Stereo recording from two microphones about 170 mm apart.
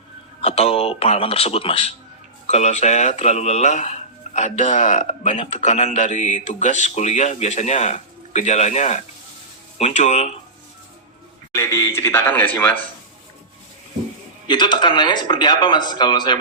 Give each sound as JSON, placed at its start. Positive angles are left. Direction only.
{"t": 0.4, "sound": "speech", "side_deg": 35}
{"t": 11.5, "sound": "a man's voice", "side_deg": 15}
{"t": 14.4, "sound": "a man's voice", "side_deg": 25}